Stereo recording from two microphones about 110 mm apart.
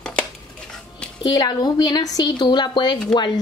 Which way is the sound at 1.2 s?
40° left (ahead or behind).